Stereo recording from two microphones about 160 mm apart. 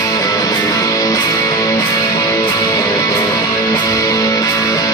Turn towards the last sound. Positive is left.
turn(degrees=20)  # may be behind; listen again after turning